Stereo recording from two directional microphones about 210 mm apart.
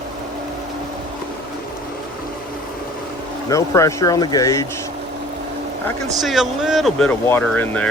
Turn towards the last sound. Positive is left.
turn(degrees=10)  # may be behind; listen again after turning